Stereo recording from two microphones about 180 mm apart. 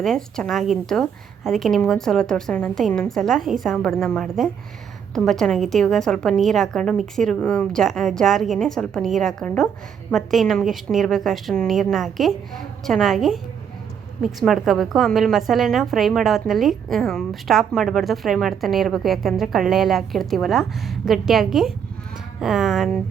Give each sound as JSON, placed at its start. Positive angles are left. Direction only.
{"t": 0.0, "sound": "a woman's voice", "side_deg": 5}